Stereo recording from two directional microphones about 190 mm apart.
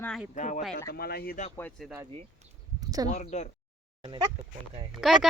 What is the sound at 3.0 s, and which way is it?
Speech, 35° left (ahead or behind).